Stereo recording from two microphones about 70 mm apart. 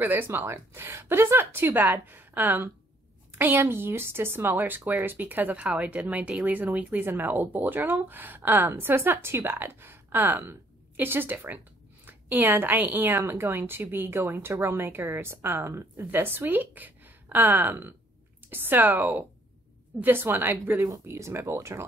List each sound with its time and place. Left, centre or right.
0.0 s speech: right
21.0 s speech: right